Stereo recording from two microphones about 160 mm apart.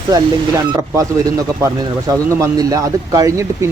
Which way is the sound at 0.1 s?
20° right (ahead or behind).